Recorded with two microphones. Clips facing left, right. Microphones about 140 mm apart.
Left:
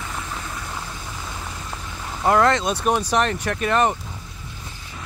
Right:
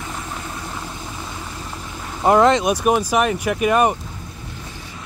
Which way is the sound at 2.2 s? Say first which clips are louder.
Right 4 dB; 20° right (ahead or behind).